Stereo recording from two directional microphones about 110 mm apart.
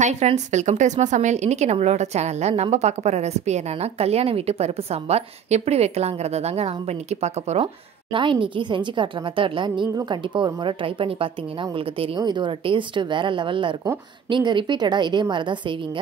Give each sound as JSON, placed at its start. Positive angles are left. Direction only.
{"t": 0.0, "sound": "a woman's voice", "side_deg": -90}
{"t": 7.6, "sound": "a woman's voice", "side_deg": -50}
{"t": 12.2, "sound": "a woman's voice", "side_deg": -45}